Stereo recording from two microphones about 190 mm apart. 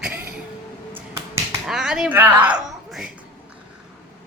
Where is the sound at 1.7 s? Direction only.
Centre (ahead or behind).